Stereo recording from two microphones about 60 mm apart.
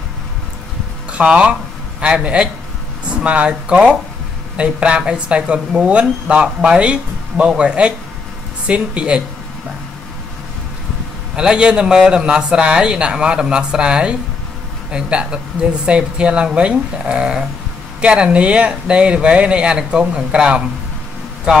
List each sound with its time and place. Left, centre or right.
1.1 s a man's voice: centre
11.3 s a man's voice: centre